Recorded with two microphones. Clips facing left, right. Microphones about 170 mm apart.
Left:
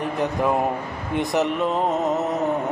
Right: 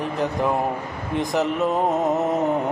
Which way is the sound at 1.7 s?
10° right (ahead or behind).